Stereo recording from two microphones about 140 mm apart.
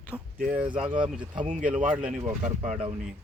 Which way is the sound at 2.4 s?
55° right (ahead or behind).